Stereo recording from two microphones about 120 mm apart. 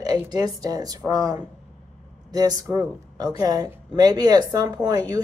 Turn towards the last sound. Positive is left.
turn(degrees=-30)  # may be behind; listen again after turning